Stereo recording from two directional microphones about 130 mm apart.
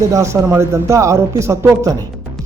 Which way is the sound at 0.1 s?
20° right (ahead or behind).